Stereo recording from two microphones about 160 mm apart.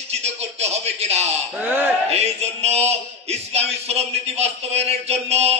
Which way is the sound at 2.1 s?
40° right (ahead or behind).